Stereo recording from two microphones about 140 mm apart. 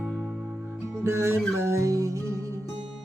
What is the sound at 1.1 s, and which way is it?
Music, 20° right (ahead or behind).